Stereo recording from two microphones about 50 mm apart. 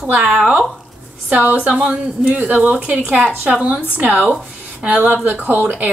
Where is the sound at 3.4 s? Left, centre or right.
Right.